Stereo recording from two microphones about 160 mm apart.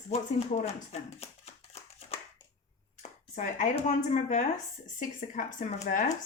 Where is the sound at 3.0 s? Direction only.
50° left (ahead or behind).